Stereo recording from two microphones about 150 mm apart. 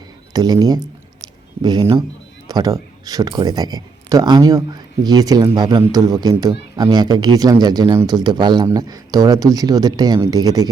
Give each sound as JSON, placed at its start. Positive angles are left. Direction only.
{"t": 0.3, "sound": "speech", "side_deg": -25}